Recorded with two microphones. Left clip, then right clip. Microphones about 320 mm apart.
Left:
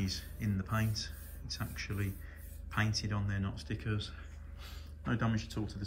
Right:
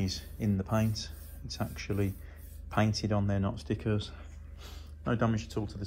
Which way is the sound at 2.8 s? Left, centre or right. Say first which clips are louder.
Right 6 dB; centre.